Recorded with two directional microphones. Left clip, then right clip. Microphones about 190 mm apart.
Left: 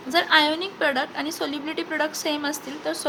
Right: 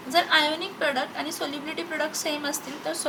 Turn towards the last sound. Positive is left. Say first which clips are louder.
# left 2 dB
turn(degrees=35)  # may be behind; listen again after turning